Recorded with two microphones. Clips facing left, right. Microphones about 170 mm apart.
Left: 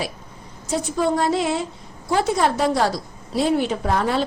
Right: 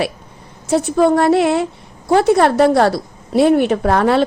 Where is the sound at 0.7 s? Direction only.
70° right (ahead or behind).